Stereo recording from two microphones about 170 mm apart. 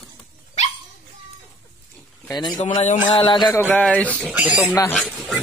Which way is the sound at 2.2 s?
25° left (ahead or behind).